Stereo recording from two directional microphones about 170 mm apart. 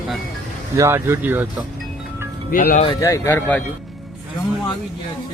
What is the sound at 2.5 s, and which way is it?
Speech, 55° left (ahead or behind).